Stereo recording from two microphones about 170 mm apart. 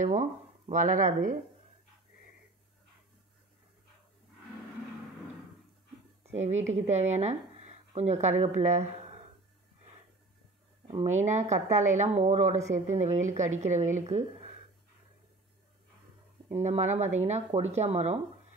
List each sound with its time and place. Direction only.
0.0 s speech: 45° right (ahead or behind)
6.3 s speech: 40° right (ahead or behind)
10.9 s speech: 40° right (ahead or behind)
16.6 s speech: 40° right (ahead or behind)